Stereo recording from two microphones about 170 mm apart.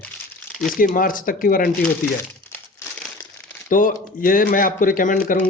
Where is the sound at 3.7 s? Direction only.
50° left (ahead or behind).